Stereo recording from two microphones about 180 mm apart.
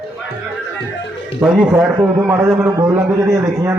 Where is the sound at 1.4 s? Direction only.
5° right (ahead or behind).